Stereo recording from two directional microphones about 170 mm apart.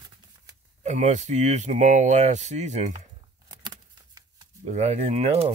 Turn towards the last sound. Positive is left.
turn(degrees=-35)  # may be behind; listen again after turning